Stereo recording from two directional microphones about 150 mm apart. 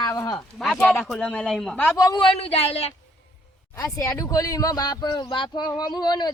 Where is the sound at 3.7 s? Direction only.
20° left (ahead or behind).